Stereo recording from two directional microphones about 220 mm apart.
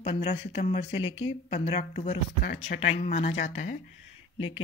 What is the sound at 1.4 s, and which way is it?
Speech, 30° left (ahead or behind).